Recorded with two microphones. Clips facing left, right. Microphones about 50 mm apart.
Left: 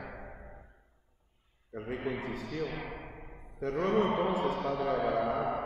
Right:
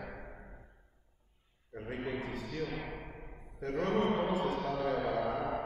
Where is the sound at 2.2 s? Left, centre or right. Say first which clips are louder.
Left 2 dB; left.